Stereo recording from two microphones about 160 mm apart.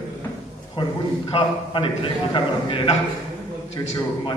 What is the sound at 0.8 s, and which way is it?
A man's voice, 30° left (ahead or behind).